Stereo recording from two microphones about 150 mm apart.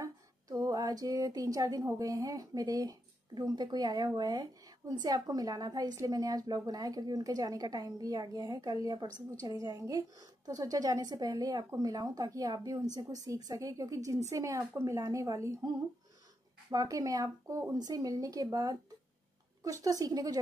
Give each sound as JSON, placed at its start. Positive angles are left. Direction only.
{"t": 0.0, "sound": "speech", "side_deg": -25}
{"t": 16.7, "sound": "speech", "side_deg": -25}